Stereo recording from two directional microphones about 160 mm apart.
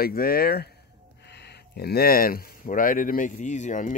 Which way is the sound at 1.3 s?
90° left.